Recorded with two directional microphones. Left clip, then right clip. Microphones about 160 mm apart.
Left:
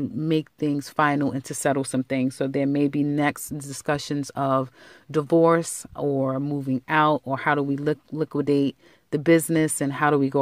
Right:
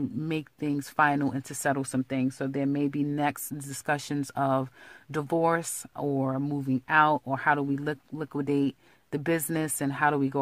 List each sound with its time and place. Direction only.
0.3 s speech: 25° left (ahead or behind)